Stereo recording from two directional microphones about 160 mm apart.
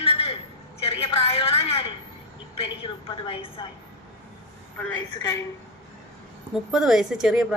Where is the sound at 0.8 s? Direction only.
40° left (ahead or behind).